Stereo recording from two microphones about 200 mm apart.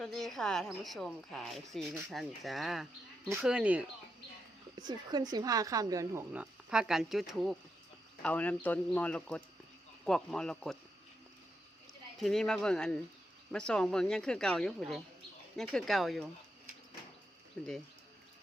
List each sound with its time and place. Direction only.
0.0 s a woman's voice: centre (ahead or behind)
4.8 s a woman's voice: 20° right (ahead or behind); by 10.8 s centre (ahead or behind)
12.2 s a woman's voice: centre (ahead or behind)